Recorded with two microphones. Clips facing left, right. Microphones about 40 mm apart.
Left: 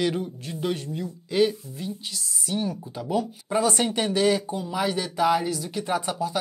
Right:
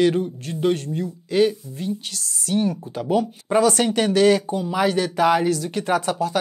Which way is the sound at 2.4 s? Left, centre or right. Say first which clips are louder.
Right 7 dB; right.